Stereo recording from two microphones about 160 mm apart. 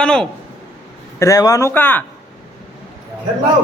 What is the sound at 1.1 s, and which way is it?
Speech, 20° left (ahead or behind).